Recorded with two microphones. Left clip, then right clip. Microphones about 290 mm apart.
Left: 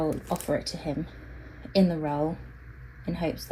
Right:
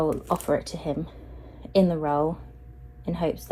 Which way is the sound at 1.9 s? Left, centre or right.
Right.